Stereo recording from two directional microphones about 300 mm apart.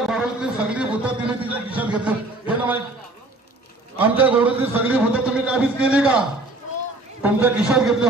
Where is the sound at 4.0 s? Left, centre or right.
Centre.